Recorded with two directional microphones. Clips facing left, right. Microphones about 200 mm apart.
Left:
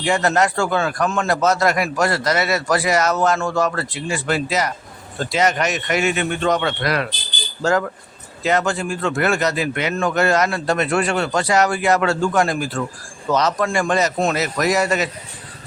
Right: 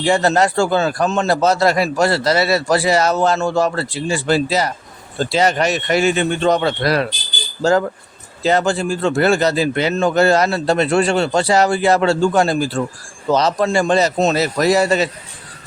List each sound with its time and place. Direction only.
0.0 s a man's voice: 30° right (ahead or behind)